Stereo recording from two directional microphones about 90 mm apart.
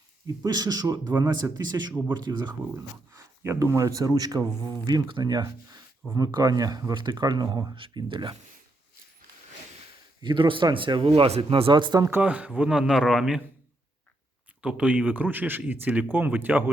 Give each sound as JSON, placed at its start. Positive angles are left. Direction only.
{"t": 0.4, "sound": "speech", "side_deg": -45}
{"t": 2.7, "sound": "speech", "side_deg": -30}
{"t": 10.2, "sound": "speech", "side_deg": -60}
{"t": 11.7, "sound": "speech", "side_deg": -55}
{"t": 12.2, "sound": "a man's voice", "side_deg": -15}
{"t": 14.6, "sound": "speech", "side_deg": -10}